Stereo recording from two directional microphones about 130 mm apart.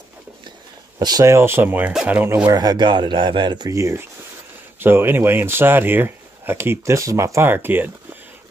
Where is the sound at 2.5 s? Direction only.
35° right (ahead or behind).